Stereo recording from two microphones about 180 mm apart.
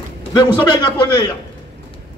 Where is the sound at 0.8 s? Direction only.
25° left (ahead or behind).